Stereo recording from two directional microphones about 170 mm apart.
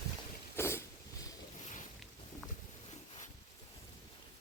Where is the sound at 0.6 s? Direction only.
15° left (ahead or behind).